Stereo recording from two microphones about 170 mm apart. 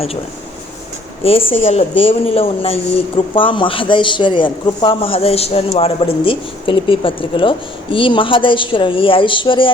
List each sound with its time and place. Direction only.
1.2 s speech: 35° left (ahead or behind)